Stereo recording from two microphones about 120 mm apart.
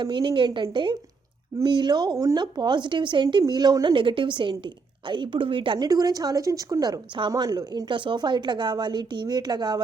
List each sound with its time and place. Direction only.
0.0 s a woman's voice: 40° right (ahead or behind)